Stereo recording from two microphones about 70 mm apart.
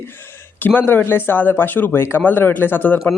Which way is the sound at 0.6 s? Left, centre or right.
Left.